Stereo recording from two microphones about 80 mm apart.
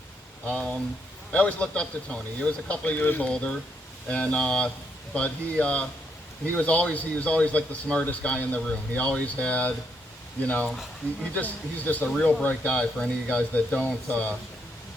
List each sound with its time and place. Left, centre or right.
0.4 s a man's voice: centre